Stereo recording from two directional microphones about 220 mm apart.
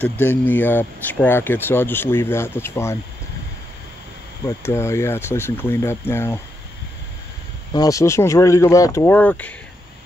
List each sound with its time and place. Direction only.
0.0 s speech: 10° left (ahead or behind)
4.5 s speech: 10° left (ahead or behind)
7.7 s speech: 15° left (ahead or behind)